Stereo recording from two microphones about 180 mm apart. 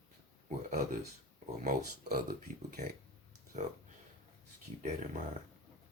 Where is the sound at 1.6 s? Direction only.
55° right (ahead or behind).